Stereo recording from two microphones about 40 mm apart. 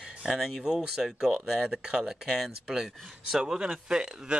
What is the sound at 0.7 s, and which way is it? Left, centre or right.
Speech, centre.